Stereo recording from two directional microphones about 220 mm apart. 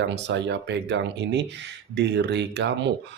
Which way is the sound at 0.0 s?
55° right (ahead or behind).